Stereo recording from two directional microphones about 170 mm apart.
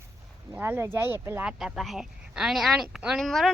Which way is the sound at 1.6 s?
Centre (ahead or behind).